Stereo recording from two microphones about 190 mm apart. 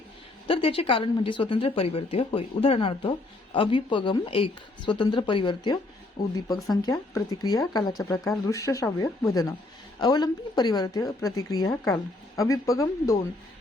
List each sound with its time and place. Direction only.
0.4 s speech: 30° left (ahead or behind)
6.2 s speech: 50° left (ahead or behind)
6.8 s speech: 20° left (ahead or behind)